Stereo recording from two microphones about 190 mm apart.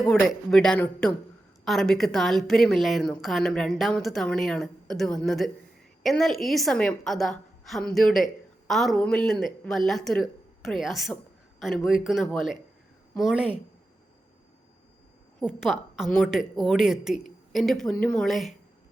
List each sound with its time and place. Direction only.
0.1 s a woman's voice: centre (ahead or behind)
15.4 s a woman's voice: centre (ahead or behind)